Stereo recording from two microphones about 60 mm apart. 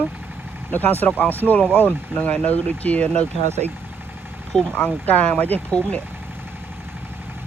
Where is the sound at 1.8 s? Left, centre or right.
Left.